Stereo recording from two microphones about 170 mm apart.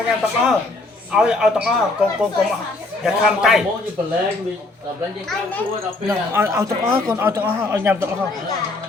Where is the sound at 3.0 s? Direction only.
Centre (ahead or behind).